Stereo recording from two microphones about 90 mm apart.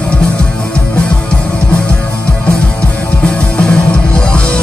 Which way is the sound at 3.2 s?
10° left (ahead or behind).